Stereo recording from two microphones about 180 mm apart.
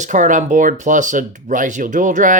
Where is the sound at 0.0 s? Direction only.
45° right (ahead or behind).